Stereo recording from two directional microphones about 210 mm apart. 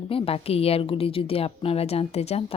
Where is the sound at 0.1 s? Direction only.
25° left (ahead or behind).